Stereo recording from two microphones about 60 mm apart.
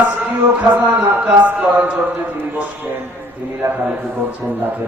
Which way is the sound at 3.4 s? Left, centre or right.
Right.